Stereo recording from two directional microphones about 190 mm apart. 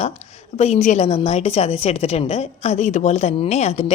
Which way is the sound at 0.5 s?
35° left (ahead or behind).